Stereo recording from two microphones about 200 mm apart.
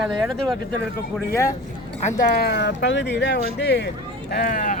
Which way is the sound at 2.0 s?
35° left (ahead or behind).